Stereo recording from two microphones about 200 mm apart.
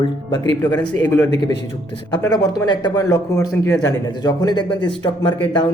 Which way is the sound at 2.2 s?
20° left (ahead or behind).